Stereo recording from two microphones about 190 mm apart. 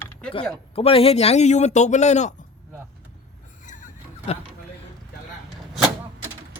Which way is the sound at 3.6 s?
40° left (ahead or behind).